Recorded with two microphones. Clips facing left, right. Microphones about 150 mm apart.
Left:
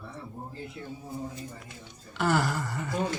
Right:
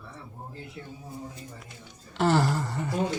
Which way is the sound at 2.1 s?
30° right (ahead or behind).